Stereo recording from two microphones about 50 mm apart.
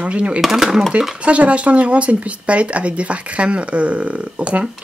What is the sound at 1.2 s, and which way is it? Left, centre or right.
Speech, right.